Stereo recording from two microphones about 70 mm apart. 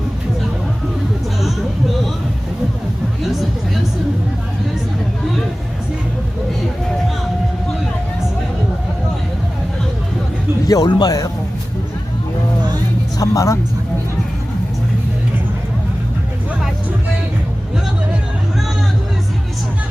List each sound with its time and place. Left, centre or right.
10.7 s speech: left
13.1 s speech: left